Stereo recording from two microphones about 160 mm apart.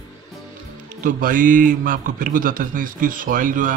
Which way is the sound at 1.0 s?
60° right (ahead or behind).